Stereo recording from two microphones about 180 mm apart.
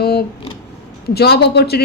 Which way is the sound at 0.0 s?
60° left (ahead or behind).